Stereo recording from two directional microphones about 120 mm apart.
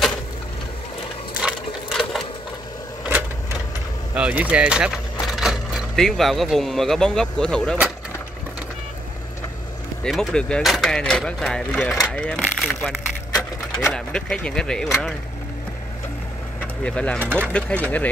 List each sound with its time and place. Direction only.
1.3 s sewing machine: 5° right (ahead or behind)
3.1 s vehicle: 15° right (ahead or behind)
4.1 s speech: 10° right (ahead or behind); by 7.7 s 5° left (ahead or behind)
10.0 s speech: 5° left (ahead or behind)
12.4 s a sound: centre (ahead or behind)
13.9 s speech: 5° left (ahead or behind)
16.8 s speech: 10° left (ahead or behind)